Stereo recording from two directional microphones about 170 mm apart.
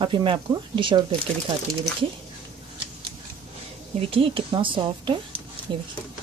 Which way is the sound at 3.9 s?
30° right (ahead or behind).